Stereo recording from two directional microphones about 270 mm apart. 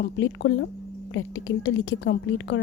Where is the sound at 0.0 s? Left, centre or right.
Left.